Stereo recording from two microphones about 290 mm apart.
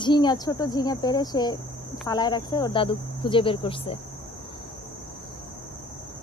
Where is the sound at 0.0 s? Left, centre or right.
Centre.